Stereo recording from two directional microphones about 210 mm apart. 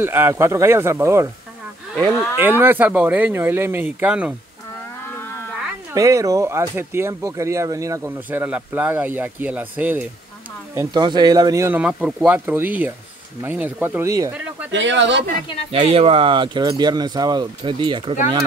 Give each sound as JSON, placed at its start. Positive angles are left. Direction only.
{"t": 0.0, "sound": "speech", "side_deg": -10}
{"t": 2.0, "sound": "speech", "side_deg": 5}
{"t": 2.6, "sound": "speech", "side_deg": -10}
{"t": 5.0, "sound": "livestock", "side_deg": 10}
{"t": 5.9, "sound": "speech", "side_deg": -15}
{"t": 14.7, "sound": "speech", "side_deg": -60}
{"t": 15.7, "sound": "speech", "side_deg": -25}